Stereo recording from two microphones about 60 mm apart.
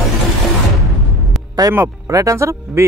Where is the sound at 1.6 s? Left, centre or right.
Right.